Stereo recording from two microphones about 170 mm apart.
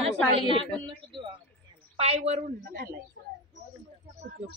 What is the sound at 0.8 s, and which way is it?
A woman's voice, 30° right (ahead or behind).